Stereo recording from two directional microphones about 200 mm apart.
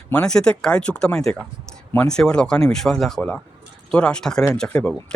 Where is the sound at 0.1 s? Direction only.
5° left (ahead or behind).